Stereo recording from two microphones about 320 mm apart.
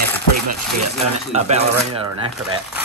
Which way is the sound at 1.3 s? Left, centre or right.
Centre.